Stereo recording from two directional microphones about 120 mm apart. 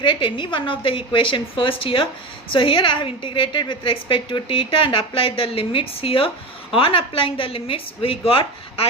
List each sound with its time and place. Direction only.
0.0 s a woman's voice: 40° left (ahead or behind)